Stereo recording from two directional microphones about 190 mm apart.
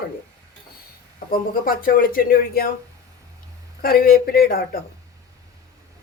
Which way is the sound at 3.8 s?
50° left (ahead or behind).